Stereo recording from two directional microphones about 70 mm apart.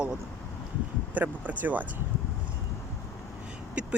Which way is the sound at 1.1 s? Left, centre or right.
Centre.